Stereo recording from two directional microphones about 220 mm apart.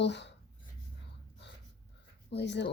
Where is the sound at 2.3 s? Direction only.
50° left (ahead or behind).